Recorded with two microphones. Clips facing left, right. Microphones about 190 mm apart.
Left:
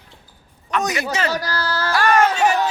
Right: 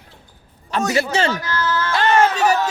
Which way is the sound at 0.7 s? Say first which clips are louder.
Even; 30° right (ahead or behind).